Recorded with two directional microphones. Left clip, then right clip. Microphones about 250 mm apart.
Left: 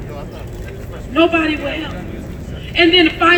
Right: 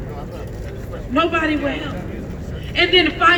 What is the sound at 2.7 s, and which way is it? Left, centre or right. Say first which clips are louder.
Speech: left 4 dB; centre.